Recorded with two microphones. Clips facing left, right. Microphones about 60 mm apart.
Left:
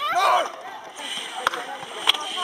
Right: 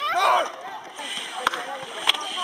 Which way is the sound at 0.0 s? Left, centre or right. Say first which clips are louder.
Left 1 dB; centre.